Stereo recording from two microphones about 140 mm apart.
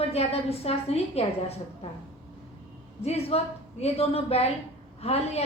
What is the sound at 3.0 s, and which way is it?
A woman's voice, 45° left (ahead or behind).